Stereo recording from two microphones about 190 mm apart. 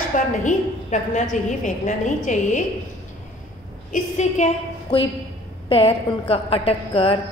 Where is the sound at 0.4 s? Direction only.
40° left (ahead or behind).